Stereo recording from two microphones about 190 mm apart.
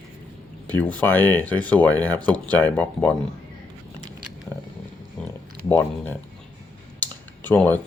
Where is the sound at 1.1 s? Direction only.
10° left (ahead or behind).